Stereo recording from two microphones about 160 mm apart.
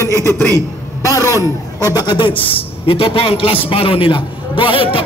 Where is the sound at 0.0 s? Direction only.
15° left (ahead or behind).